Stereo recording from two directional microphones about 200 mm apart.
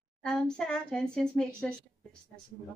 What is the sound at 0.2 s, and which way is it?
A woman's voice, 5° left (ahead or behind).